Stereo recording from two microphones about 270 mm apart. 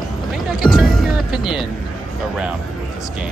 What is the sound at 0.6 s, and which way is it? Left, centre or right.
Music, centre.